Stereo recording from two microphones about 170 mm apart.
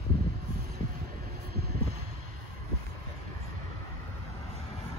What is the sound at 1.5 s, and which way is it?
Vehicle, 65° right (ahead or behind).